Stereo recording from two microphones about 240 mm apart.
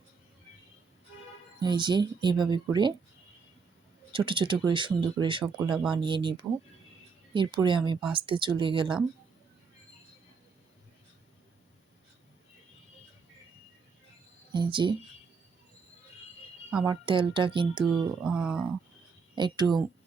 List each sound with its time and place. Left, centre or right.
1.6 s speech: centre
4.1 s speech: centre
14.5 s a sound: centre
16.8 s speech: centre
17.8 s speech: centre
19.4 s speech: centre